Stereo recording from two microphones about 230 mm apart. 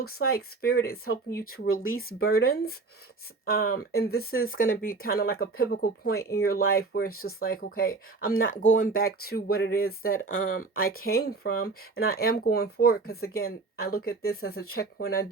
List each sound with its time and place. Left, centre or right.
0.0 s speech: left
1.6 s speech: left
1.9 s speech: left